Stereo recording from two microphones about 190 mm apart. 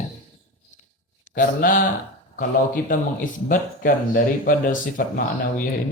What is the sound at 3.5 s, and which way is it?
Speech, 50° left (ahead or behind).